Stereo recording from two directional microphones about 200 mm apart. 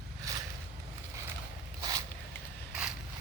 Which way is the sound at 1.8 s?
20° right (ahead or behind).